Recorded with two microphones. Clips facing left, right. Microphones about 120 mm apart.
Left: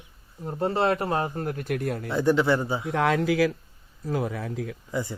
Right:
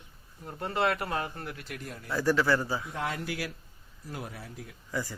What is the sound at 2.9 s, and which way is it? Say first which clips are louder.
Speech: left 10 dB; 90° left.